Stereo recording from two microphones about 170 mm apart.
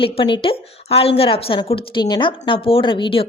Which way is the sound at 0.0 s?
30° left (ahead or behind).